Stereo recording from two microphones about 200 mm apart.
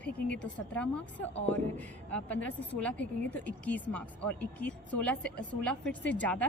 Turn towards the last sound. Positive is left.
turn(degrees=5)  # may be behind; listen again after turning